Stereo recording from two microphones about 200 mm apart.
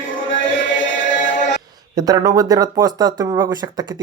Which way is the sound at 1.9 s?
20° right (ahead or behind).